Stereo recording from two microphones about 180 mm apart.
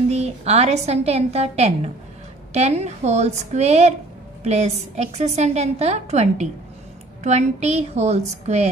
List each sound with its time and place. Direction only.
0.1 s a woman's voice: 35° right (ahead or behind)